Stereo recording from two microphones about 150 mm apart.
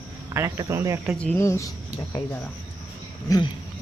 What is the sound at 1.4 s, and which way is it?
Speech, 20° left (ahead or behind).